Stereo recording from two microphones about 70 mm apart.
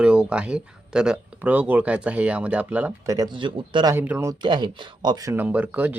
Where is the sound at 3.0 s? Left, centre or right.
Right.